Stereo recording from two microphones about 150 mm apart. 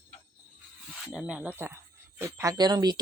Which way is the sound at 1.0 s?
5° right (ahead or behind).